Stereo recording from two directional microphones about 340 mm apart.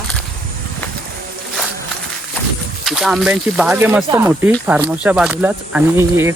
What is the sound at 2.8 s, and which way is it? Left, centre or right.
Speech, centre.